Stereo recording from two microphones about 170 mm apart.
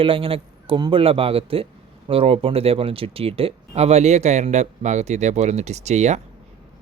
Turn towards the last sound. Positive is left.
turn(degrees=-40)  # may be behind; listen again after turning